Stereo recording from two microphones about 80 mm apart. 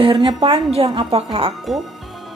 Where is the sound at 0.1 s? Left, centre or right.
Right.